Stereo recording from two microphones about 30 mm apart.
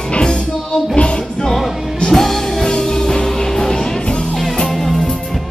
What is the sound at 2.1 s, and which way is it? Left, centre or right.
Music, centre.